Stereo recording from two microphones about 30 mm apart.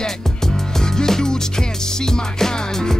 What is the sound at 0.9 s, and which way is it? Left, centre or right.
Music, centre.